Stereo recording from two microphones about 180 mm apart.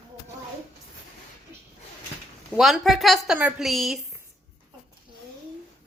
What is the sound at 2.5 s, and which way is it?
A woman's voice, centre (ahead or behind).